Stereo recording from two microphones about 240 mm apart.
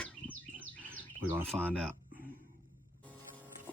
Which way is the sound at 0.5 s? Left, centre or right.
Right.